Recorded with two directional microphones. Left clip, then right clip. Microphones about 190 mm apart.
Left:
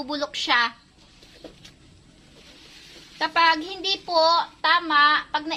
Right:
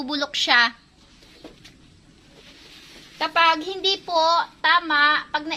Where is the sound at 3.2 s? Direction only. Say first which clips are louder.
Right 1 dB; 35° right (ahead or behind).